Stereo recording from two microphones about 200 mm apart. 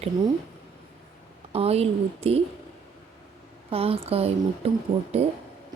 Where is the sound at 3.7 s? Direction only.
30° right (ahead or behind).